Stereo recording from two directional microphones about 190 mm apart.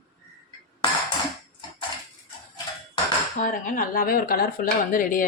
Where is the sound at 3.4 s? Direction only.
45° left (ahead or behind).